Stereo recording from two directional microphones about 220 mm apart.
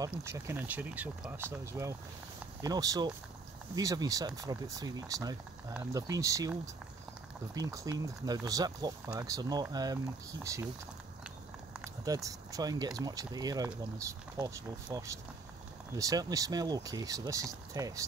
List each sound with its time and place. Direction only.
0.0 s speech: 15° right (ahead or behind)
7.5 s speech: 15° right (ahead or behind)
12.0 s speech: 15° right (ahead or behind)